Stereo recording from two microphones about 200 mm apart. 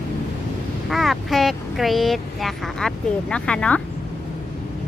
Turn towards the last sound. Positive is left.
turn(degrees=5)  # may be behind; listen again after turning